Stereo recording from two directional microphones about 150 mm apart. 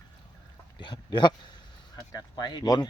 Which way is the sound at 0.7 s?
30° left (ahead or behind).